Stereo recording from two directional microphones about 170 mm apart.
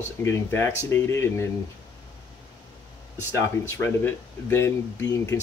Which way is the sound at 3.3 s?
15° left (ahead or behind).